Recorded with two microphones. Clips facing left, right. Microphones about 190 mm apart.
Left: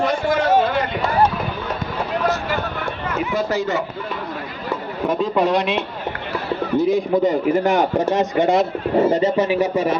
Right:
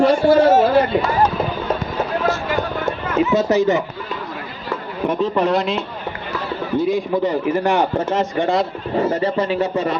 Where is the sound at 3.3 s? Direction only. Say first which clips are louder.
Right 5 dB; 20° right (ahead or behind).